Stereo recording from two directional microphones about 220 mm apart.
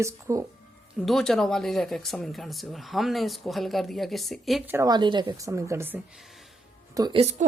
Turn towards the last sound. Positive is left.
turn(degrees=-25)  # may be behind; listen again after turning